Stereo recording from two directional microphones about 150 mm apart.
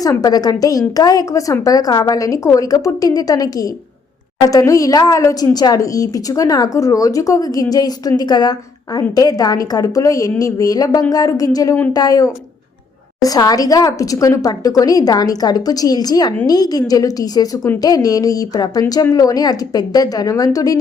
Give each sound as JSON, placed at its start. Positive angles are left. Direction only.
{"t": 0.0, "sound": "speech", "side_deg": 25}